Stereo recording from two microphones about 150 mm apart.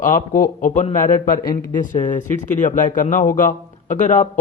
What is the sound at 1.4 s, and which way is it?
Speech, 30° left (ahead or behind).